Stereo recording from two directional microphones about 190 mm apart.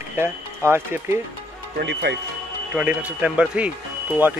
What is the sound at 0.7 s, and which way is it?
Speech, 10° right (ahead or behind).